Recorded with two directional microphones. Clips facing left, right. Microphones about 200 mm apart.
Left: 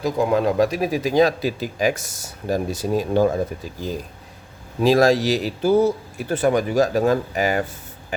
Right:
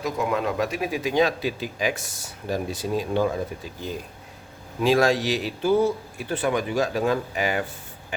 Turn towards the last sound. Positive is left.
turn(degrees=45)  # may be behind; listen again after turning